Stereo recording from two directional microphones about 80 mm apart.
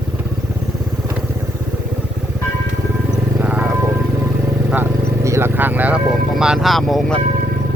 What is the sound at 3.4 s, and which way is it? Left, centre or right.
Music, centre.